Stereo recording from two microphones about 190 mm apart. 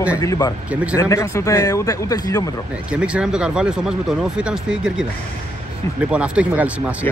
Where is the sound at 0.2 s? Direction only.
15° left (ahead or behind).